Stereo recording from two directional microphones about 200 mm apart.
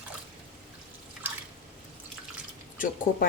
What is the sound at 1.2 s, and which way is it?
Drip, 10° right (ahead or behind).